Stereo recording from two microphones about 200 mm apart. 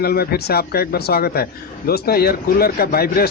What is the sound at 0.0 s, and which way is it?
Speech, 50° left (ahead or behind).